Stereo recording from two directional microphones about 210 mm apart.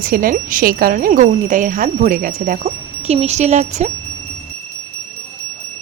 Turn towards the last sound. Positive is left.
turn(degrees=-35)  # may be behind; listen again after turning